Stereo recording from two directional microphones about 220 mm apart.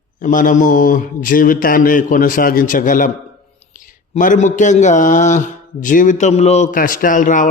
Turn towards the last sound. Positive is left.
turn(degrees=35)  # may be behind; listen again after turning